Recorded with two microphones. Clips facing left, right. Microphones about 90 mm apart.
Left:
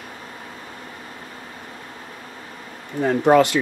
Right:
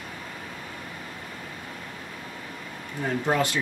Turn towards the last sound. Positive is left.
turn(degrees=75)  # may be behind; listen again after turning